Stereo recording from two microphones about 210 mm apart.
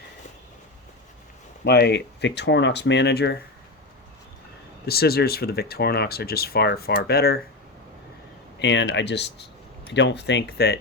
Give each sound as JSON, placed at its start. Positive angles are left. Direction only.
{"t": 1.6, "sound": "speech", "side_deg": 50}
{"t": 4.9, "sound": "speech", "side_deg": 50}
{"t": 8.5, "sound": "speech", "side_deg": 55}